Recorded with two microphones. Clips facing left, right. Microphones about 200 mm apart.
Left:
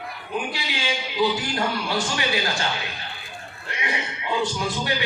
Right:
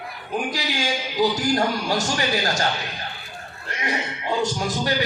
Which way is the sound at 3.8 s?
40° right (ahead or behind).